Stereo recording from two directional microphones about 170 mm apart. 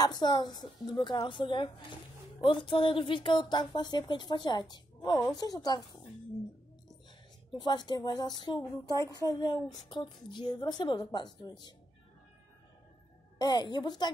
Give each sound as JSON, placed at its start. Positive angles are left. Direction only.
{"t": 0.0, "sound": "a woman's voice", "side_deg": 25}
{"t": 7.5, "sound": "a woman's voice", "side_deg": 25}
{"t": 13.4, "sound": "a woman's voice", "side_deg": 25}